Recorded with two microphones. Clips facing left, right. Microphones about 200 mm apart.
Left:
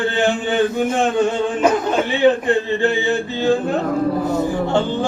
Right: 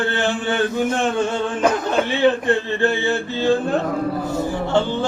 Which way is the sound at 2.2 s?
15° left (ahead or behind).